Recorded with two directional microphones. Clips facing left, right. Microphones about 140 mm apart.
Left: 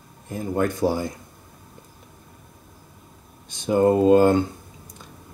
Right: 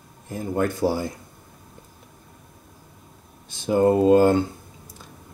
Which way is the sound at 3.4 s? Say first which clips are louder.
Left 1 dB; 20° left (ahead or behind).